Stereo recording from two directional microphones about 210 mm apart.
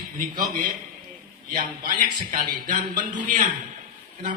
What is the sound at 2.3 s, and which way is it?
Speech, 40° right (ahead or behind).